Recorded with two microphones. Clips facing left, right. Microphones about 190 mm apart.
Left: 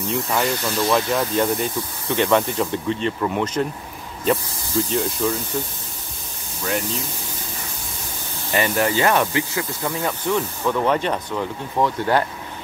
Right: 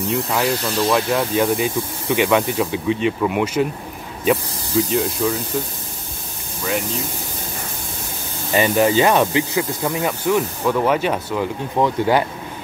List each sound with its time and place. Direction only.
0.3 s speech: centre (ahead or behind)
8.5 s speech: 20° right (ahead or behind)